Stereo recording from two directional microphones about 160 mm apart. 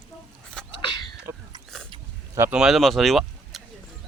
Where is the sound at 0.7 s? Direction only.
30° left (ahead or behind).